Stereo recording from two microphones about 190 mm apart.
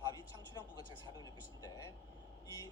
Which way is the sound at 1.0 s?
20° left (ahead or behind).